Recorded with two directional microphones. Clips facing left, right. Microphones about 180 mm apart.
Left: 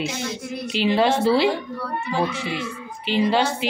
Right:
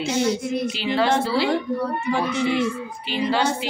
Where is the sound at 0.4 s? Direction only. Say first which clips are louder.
Right 6 dB; 20° right (ahead or behind).